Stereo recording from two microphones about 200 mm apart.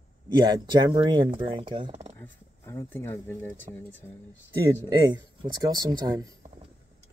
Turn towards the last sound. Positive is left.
turn(degrees=-20)  # may be behind; listen again after turning